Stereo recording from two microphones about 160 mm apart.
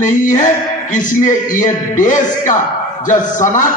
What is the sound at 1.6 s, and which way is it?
A man's voice, 55° left (ahead or behind).